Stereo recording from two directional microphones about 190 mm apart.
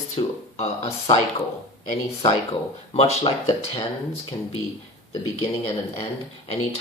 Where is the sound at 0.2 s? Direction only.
35° left (ahead or behind).